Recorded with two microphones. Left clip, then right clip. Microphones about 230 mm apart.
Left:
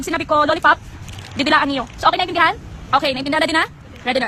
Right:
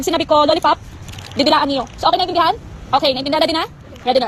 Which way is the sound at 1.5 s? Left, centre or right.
Left.